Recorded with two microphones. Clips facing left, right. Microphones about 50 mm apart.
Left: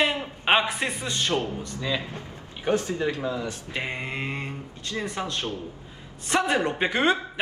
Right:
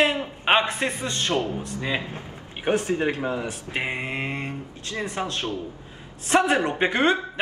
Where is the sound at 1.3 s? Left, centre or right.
Right.